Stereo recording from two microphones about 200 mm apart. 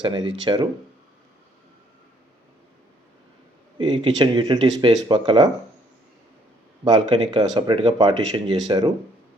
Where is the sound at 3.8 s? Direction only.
25° right (ahead or behind).